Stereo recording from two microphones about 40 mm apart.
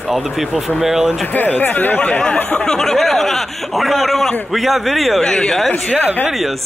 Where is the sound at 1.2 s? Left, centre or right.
Left.